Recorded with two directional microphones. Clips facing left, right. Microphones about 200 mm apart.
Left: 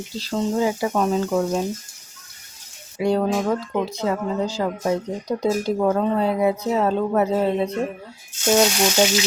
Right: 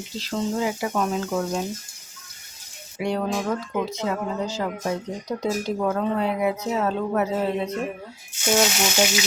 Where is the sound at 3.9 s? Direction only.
35° left (ahead or behind).